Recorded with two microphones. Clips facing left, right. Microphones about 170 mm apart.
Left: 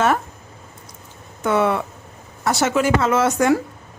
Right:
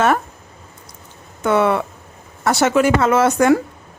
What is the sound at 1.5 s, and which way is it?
Speech, 65° right (ahead or behind).